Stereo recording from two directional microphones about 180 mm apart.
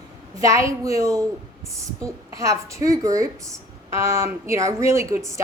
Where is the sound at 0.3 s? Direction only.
20° right (ahead or behind).